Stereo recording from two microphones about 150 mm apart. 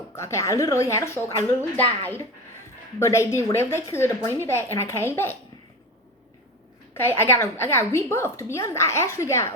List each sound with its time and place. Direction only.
0.2 s a woman's voice: 20° left (ahead or behind)
7.2 s a woman's voice: 15° left (ahead or behind)